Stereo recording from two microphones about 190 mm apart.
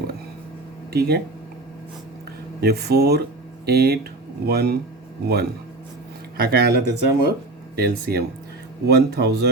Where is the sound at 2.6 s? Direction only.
55° right (ahead or behind).